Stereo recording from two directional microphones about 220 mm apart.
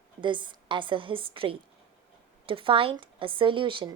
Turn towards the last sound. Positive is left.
turn(degrees=-20)  # may be behind; listen again after turning